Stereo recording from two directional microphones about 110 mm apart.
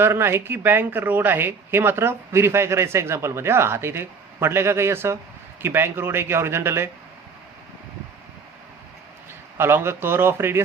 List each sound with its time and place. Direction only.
0.0 s speech: 20° right (ahead or behind)
9.6 s speech: 20° right (ahead or behind)